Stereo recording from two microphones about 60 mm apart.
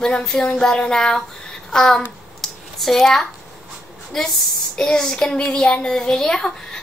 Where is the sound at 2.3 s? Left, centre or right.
Centre.